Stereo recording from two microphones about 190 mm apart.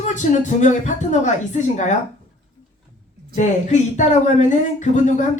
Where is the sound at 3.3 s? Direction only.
40° left (ahead or behind).